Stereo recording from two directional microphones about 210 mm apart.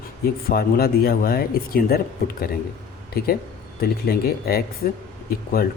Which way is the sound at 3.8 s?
45° left (ahead or behind).